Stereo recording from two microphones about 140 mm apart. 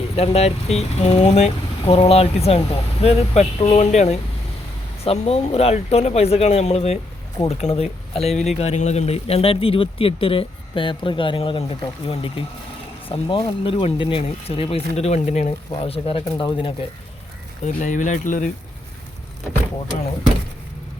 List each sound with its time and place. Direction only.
0.2 s speech: 50° left (ahead or behind)
17.6 s speech: 65° left (ahead or behind)